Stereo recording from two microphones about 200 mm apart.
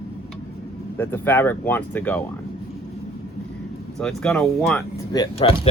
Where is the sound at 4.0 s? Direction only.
5° left (ahead or behind).